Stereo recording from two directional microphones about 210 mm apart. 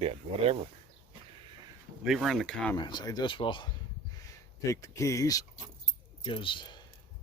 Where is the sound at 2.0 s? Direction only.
Centre (ahead or behind).